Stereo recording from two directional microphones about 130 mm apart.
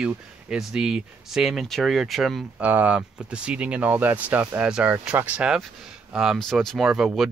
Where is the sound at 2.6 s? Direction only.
10° right (ahead or behind).